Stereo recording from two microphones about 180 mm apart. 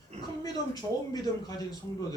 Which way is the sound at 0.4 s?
20° left (ahead or behind).